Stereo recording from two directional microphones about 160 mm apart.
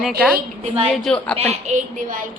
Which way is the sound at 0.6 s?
40° right (ahead or behind).